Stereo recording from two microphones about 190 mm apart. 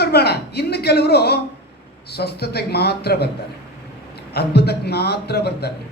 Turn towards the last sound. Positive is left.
turn(degrees=60)  # may be behind; listen again after turning